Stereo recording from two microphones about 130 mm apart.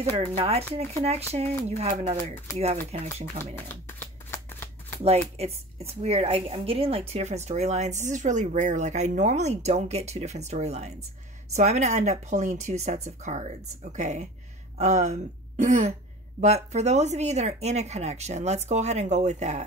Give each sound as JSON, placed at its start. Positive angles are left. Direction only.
{"t": 0.4, "sound": "speech", "side_deg": -50}
{"t": 3.5, "sound": "speech", "side_deg": 15}
{"t": 4.5, "sound": "shuffling cards", "side_deg": 15}
{"t": 5.0, "sound": "speech", "side_deg": -55}
{"t": 16.3, "sound": "speech", "side_deg": -60}